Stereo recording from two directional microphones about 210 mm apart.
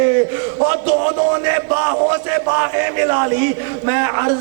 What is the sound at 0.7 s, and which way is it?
A man's voice, 10° right (ahead or behind).